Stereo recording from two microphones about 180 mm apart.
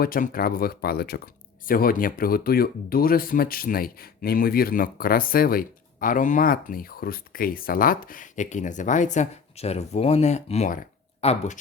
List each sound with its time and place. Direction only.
0.0 s speech: 55° left (ahead or behind); by 11.6 s 40° left (ahead or behind)